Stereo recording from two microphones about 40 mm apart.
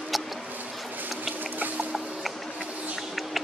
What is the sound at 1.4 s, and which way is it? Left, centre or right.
Boat, right.